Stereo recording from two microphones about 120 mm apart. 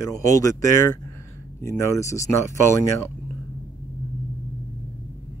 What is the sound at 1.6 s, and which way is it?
Speech, 25° left (ahead or behind).